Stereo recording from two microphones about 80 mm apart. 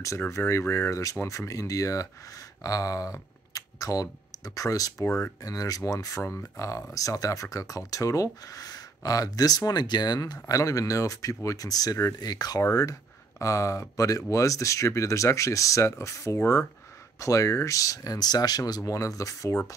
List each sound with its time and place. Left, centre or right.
0.3 s speech: left
5.0 s speech: left
5.4 s speech: left
10.4 s speech: left
18.9 s speech: left